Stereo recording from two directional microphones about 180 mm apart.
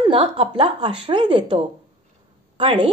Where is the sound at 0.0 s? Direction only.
30° right (ahead or behind).